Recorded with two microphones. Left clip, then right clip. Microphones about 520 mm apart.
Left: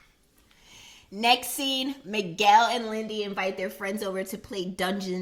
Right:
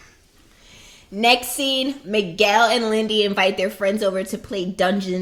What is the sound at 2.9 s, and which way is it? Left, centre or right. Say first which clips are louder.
Speech: right 12 dB; centre.